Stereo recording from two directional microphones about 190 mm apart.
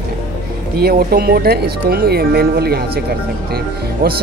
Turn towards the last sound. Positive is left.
turn(degrees=-55)  # may be behind; listen again after turning